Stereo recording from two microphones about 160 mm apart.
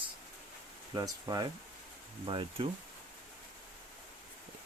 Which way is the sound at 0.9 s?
25° right (ahead or behind).